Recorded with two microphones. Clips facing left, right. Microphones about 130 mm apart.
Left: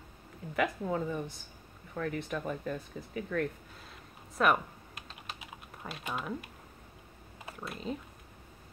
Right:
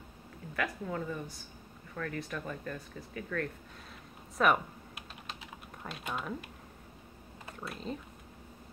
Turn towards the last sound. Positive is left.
turn(degrees=0)  # may be behind; listen again after turning